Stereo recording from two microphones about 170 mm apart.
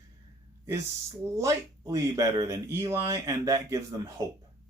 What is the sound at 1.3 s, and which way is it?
Speech, 20° right (ahead or behind).